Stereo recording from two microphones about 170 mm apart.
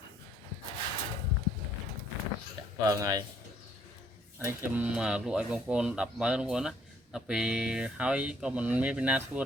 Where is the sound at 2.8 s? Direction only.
20° right (ahead or behind).